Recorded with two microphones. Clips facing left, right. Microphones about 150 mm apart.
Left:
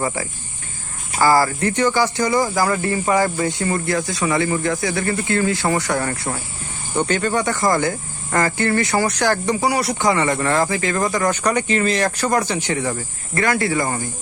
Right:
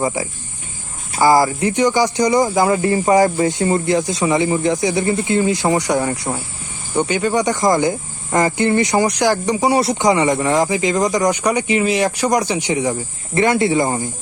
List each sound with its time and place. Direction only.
0.1 s speech: 15° right (ahead or behind)
9.6 s speech: 25° right (ahead or behind)